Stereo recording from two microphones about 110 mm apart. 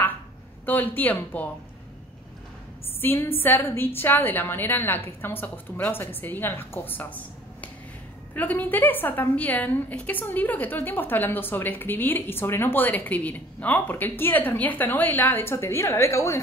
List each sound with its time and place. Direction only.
0.7 s a woman's voice: 15° left (ahead or behind)
3.0 s a woman's voice: 20° left (ahead or behind)